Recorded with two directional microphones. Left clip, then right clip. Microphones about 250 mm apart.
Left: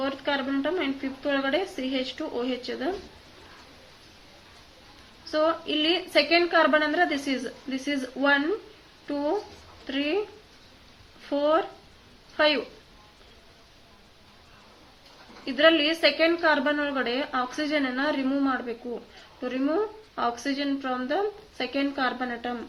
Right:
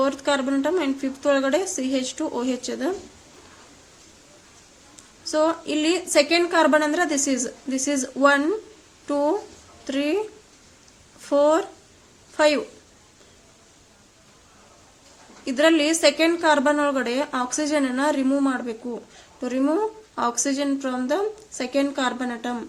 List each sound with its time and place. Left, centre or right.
0.0 s a woman's voice: right
5.2 s a woman's voice: right
9.8 s speech: right
11.3 s a woman's voice: right
15.4 s a woman's voice: right